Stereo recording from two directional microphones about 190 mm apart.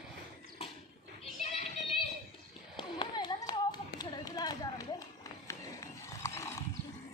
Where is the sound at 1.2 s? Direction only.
30° left (ahead or behind); by 6.6 s 15° left (ahead or behind).